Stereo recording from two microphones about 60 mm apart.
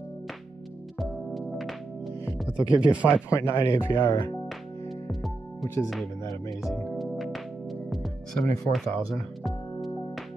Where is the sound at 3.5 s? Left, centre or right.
Left.